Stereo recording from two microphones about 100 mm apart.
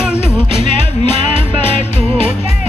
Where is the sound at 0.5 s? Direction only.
90° left.